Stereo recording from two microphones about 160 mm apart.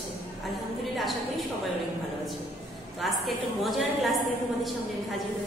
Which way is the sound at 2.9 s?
Centre (ahead or behind).